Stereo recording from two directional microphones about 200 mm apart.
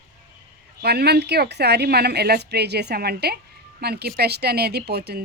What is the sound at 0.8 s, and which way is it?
A woman's voice, 55° right (ahead or behind).